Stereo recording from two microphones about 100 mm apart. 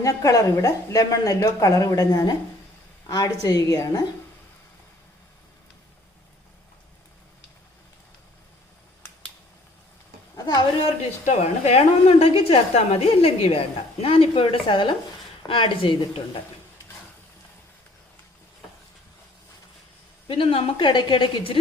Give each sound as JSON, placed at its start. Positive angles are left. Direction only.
{"t": 0.0, "sound": "a woman's voice", "side_deg": 35}
{"t": 10.3, "sound": "a sound", "side_deg": 45}
{"t": 11.6, "sound": "a woman's voice", "side_deg": 90}
{"t": 20.2, "sound": "a woman's voice", "side_deg": 60}